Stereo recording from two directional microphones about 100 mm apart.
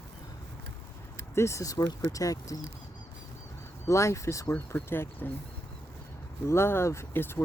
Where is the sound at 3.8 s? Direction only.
30° left (ahead or behind).